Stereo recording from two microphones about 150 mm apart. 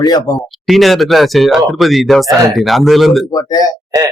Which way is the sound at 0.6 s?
Centre (ahead or behind).